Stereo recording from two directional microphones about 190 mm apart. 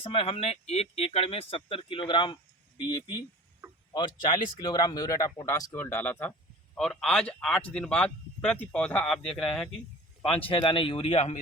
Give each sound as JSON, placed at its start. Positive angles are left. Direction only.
{"t": 0.0, "sound": "speech", "side_deg": 30}
{"t": 10.2, "sound": "speech", "side_deg": 30}